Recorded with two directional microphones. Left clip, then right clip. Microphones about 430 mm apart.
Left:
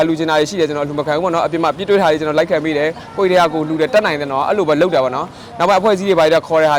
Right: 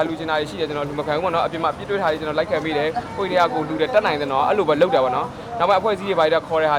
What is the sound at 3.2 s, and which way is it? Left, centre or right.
A man's voice, left.